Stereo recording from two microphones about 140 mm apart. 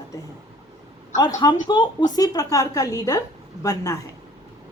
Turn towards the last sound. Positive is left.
turn(degrees=25)  # may be behind; listen again after turning